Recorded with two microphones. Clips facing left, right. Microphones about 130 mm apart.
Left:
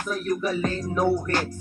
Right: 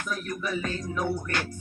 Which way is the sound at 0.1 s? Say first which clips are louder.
Left 6 dB; 35° left (ahead or behind).